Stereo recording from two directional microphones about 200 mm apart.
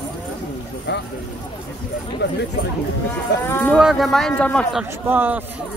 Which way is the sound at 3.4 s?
10° left (ahead or behind).